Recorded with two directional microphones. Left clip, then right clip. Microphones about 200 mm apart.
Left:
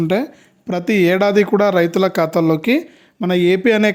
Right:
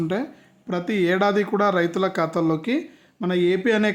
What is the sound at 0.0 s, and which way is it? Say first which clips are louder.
Speech: left 8 dB; 40° left (ahead or behind).